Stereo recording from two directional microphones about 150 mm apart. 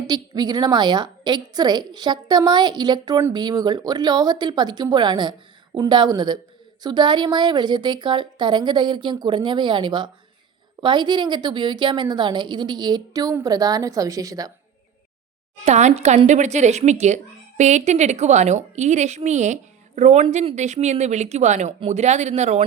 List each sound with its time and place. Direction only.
0.1 s a woman's voice: 25° right (ahead or behind)
15.6 s a woman's voice: 50° right (ahead or behind)